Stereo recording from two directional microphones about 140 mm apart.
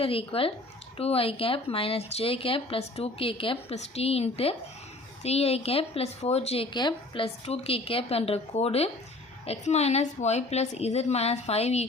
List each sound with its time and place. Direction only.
0.0 s speech: 40° left (ahead or behind)
6.7 s speech: 35° left (ahead or behind)